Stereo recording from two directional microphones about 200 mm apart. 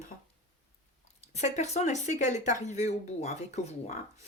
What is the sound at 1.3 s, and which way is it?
Speech, 35° left (ahead or behind).